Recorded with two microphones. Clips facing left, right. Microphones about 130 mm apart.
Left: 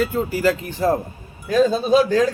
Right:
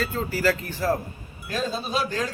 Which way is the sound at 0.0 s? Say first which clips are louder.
Left 5 dB; 15° left (ahead or behind).